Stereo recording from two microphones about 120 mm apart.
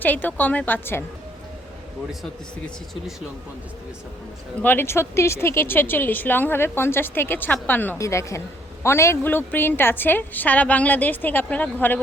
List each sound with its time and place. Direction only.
0.0 s speech: 15° left (ahead or behind)
4.6 s speech: 15° left (ahead or behind)
7.9 s a woman's voice: 25° left (ahead or behind)